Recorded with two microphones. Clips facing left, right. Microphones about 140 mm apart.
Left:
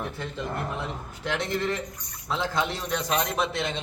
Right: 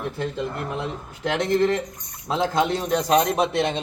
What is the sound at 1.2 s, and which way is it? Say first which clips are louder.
A man's voice: right 8 dB; 45° right (ahead or behind).